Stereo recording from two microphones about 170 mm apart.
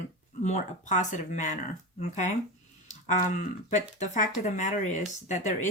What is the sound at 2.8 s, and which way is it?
Speech, 45° left (ahead or behind).